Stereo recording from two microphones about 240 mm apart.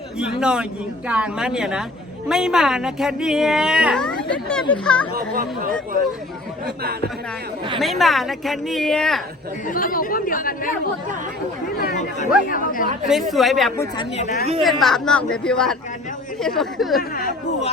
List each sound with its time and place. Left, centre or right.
0.2 s speech: centre
5.1 s speech: right
7.8 s speech: centre
9.6 s speech: left
11.8 s speech: left
13.1 s speech: centre
13.7 s speech: centre
14.6 s speech: centre
17.0 s speech: left